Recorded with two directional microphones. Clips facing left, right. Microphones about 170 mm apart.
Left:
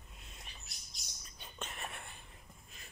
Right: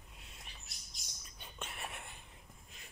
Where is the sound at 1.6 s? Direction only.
10° right (ahead or behind).